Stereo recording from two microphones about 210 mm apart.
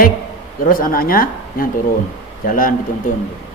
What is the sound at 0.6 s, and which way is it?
A man's voice, 40° left (ahead or behind).